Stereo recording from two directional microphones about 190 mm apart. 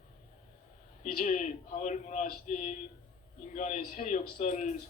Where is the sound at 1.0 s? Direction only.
45° left (ahead or behind).